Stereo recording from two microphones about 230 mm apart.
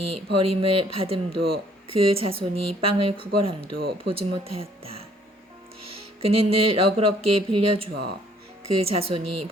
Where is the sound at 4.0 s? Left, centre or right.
Right.